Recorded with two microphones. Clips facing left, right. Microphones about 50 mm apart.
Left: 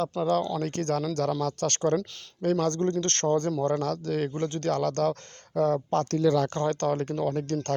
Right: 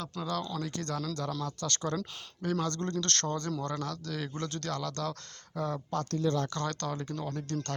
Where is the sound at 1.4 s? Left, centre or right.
Left.